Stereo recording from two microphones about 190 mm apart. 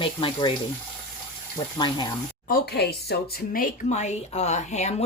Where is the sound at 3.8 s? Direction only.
35° left (ahead or behind).